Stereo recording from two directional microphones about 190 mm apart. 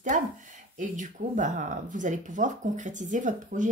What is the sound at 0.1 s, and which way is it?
Speech, 40° right (ahead or behind).